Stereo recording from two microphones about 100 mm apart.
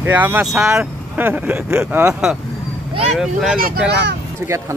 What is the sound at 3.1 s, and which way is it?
Speech, 5° right (ahead or behind).